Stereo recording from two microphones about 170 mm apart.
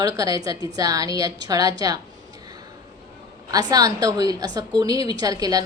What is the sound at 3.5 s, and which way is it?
A woman's voice, 20° right (ahead or behind).